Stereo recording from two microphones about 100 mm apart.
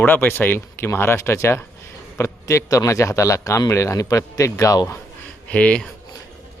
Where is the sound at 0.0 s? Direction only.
20° left (ahead or behind).